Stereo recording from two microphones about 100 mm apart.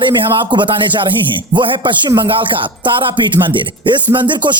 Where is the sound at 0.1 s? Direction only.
50° right (ahead or behind).